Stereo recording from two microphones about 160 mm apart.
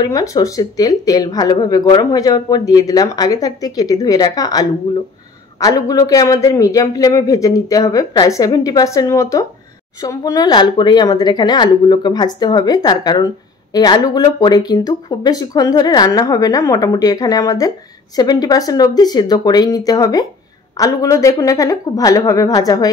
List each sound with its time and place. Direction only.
0.0 s speech: 20° left (ahead or behind)